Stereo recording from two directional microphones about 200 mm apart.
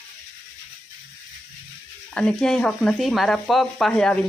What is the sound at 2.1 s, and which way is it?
Sizzle, 5° left (ahead or behind).